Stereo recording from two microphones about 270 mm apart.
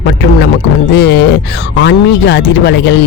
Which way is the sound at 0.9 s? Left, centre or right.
Left.